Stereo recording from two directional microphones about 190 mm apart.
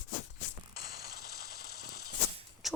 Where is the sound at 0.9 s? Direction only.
50° left (ahead or behind).